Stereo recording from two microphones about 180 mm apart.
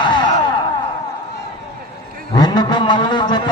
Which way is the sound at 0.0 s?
25° left (ahead or behind).